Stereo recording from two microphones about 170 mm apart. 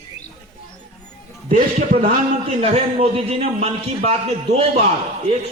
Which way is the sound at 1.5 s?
45° right (ahead or behind).